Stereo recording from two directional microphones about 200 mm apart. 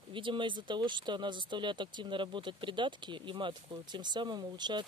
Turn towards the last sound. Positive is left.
turn(degrees=-20)  # may be behind; listen again after turning